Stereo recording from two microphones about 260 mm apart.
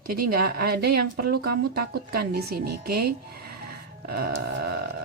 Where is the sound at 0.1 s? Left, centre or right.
Right.